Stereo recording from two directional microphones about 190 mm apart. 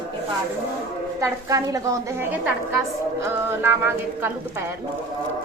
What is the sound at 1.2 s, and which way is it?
A woman's voice, 15° right (ahead or behind).